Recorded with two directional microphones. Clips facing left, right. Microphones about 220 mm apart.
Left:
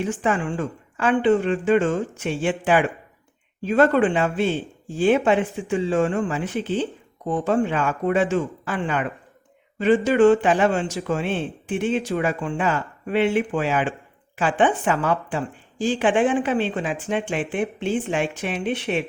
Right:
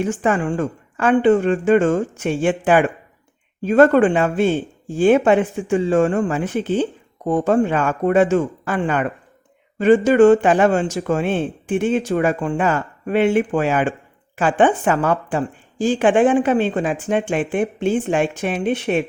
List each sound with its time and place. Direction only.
0.0 s a woman's voice: 45° right (ahead or behind)